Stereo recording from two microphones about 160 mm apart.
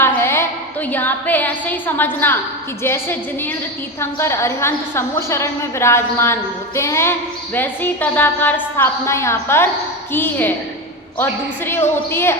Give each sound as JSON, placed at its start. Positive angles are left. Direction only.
{"t": 0.0, "sound": "a woman's voice", "side_deg": 15}